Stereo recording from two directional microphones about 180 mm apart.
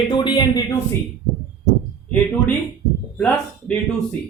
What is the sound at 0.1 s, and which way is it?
Speech, 25° left (ahead or behind).